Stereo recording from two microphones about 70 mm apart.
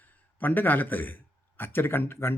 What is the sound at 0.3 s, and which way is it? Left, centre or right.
Speech, left.